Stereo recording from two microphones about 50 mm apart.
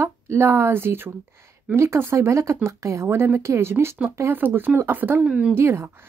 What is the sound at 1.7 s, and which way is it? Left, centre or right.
Speech, right.